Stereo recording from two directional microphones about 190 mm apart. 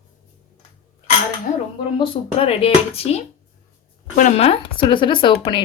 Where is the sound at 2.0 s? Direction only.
30° left (ahead or behind).